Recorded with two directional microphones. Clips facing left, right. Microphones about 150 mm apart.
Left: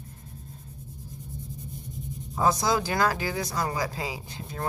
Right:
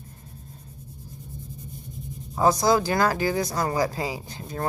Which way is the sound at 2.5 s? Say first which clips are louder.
Right 5 dB; 40° right (ahead or behind).